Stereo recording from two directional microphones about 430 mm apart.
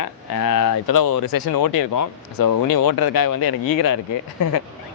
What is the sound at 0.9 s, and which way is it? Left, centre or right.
Speech, left.